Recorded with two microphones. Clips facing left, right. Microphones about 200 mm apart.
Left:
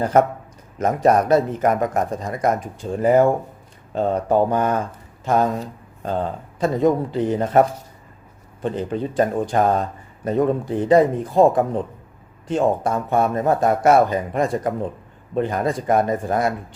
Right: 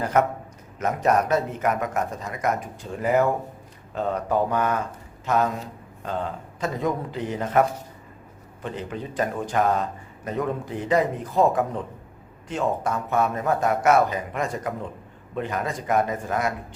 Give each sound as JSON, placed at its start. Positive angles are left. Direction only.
{"t": 0.0, "sound": "speech", "side_deg": 30}